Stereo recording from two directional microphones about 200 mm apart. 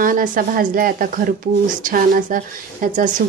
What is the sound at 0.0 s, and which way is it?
Speech, 45° right (ahead or behind).